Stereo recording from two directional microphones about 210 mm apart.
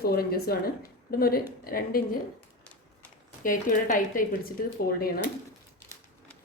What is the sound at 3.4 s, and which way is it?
Speech, 40° left (ahead or behind).